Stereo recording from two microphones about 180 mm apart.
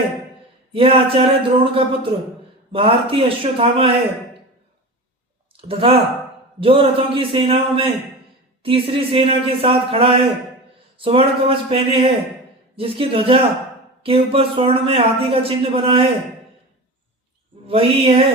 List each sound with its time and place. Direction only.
0.7 s a man's voice: 30° right (ahead or behind)
5.8 s a man's voice: 30° right (ahead or behind)
17.7 s a man's voice: 30° right (ahead or behind)